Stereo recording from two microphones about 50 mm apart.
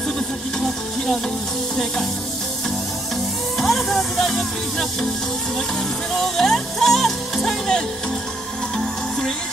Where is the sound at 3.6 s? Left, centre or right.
Centre.